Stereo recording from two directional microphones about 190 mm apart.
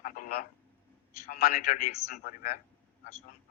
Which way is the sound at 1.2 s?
45° left (ahead or behind).